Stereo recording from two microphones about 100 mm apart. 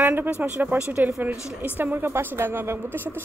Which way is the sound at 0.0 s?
20° right (ahead or behind).